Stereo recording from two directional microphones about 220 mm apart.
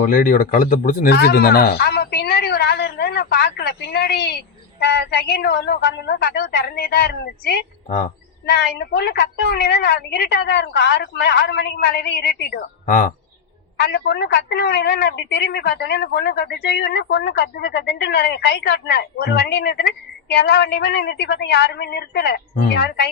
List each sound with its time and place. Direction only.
0.0 s a woman's voice: 35° left (ahead or behind)